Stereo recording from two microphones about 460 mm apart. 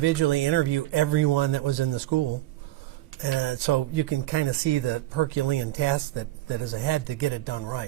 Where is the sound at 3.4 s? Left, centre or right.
Right.